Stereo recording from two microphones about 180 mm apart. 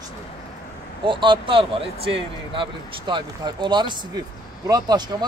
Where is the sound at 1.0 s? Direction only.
25° right (ahead or behind).